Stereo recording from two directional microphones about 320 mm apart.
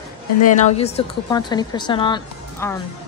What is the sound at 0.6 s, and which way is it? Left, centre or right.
A woman's voice, centre.